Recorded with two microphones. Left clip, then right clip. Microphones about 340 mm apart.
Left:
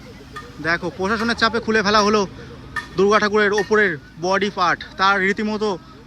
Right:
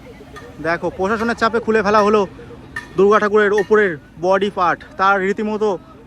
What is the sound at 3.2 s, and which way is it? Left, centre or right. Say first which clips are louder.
Speech: right 3 dB; centre.